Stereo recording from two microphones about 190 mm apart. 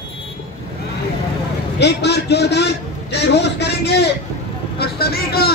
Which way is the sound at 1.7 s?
65° left (ahead or behind).